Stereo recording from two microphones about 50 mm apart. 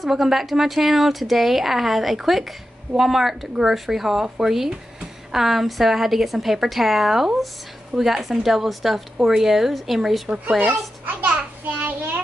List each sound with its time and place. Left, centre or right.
0.0 s a woman's voice: centre
11.1 s a child's voice: right
11.8 s child singing: right